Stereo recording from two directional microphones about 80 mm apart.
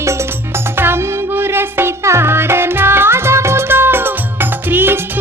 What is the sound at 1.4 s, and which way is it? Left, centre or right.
Music, right.